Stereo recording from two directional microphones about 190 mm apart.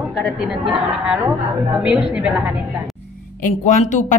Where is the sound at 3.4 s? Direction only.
40° left (ahead or behind).